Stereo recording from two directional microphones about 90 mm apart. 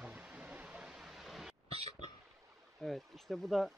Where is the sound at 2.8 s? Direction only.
5° left (ahead or behind).